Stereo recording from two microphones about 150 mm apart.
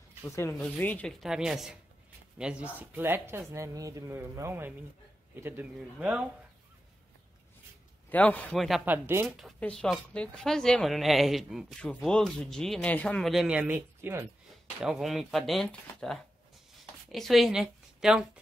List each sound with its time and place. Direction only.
0.7 s a man's voice: 10° left (ahead or behind)
1.2 s speech: 5° right (ahead or behind)
8.1 s a man's voice: 10° left (ahead or behind)
8.8 s speech: 15° right (ahead or behind)
9.4 s speech: 5° left (ahead or behind)
13.6 s speech: 15° right (ahead or behind)
14.8 s a woman's voice: centre (ahead or behind)